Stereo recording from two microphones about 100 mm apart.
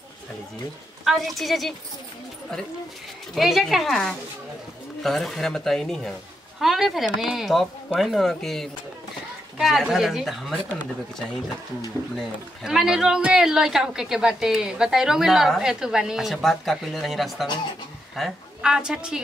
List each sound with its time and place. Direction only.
1.0 s a woman's voice: centre (ahead or behind)
3.3 s a woman's voice: centre (ahead or behind)
12.2 s a woman's voice: 5° right (ahead or behind)